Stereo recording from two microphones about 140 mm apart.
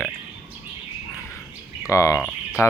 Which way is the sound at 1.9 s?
20° left (ahead or behind).